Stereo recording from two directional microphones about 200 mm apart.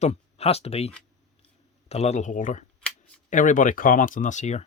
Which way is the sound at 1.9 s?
35° left (ahead or behind).